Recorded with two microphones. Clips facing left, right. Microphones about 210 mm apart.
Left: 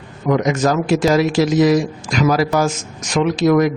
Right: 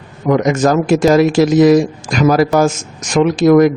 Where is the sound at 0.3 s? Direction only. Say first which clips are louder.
Right 4 dB; 50° right (ahead or behind).